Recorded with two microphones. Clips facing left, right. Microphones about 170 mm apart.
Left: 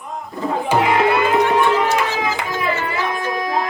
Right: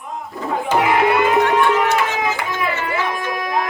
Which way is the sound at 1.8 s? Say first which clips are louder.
Even; 35° left (ahead or behind).